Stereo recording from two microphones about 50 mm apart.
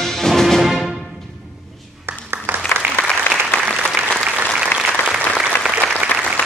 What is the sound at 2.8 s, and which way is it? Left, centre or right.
Applause, right.